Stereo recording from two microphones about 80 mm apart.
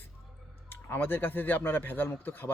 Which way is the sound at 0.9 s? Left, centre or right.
Left.